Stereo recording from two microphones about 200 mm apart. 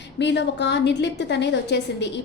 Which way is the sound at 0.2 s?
60° left (ahead or behind).